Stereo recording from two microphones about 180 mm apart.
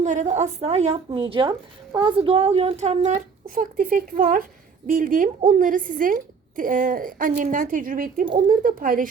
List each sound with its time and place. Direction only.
0.0 s a woman's voice: 45° right (ahead or behind)